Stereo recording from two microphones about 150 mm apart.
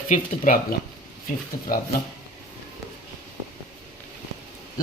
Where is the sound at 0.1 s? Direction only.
60° left (ahead or behind).